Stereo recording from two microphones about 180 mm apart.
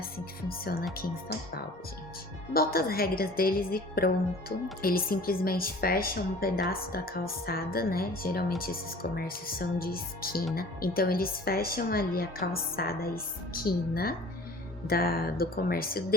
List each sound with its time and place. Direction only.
0.4 s a woman's voice: 55° left (ahead or behind)
2.5 s a woman's voice: 55° left (ahead or behind)